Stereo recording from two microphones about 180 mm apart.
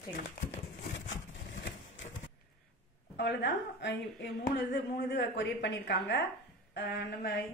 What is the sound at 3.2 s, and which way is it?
A woman's voice, 75° left (ahead or behind).